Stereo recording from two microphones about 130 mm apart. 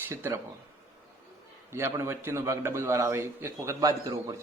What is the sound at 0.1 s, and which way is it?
Speech, 20° right (ahead or behind).